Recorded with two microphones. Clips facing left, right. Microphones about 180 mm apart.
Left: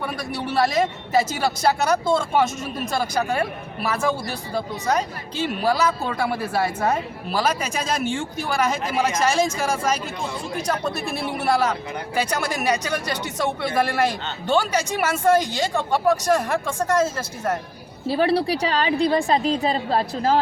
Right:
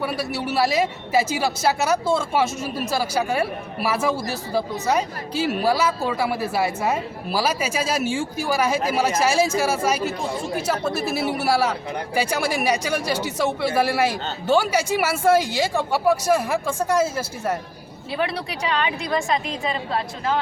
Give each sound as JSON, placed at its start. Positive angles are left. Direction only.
{"t": 0.0, "sound": "speech", "side_deg": -5}
{"t": 18.1, "sound": "a woman's voice", "side_deg": 35}